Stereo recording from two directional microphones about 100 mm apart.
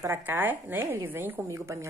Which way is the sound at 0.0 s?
20° right (ahead or behind).